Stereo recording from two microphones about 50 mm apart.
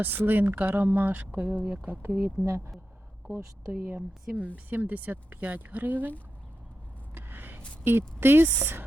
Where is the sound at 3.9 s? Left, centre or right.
Right.